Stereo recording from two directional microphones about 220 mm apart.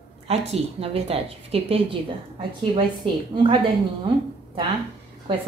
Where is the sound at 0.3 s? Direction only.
30° right (ahead or behind).